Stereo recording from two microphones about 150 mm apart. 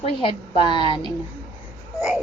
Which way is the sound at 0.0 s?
35° left (ahead or behind).